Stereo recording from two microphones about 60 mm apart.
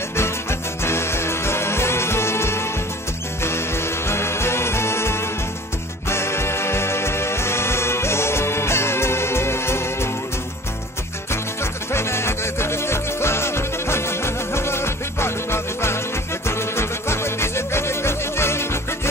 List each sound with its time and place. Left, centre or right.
0.1 s music: left
11.6 s music: left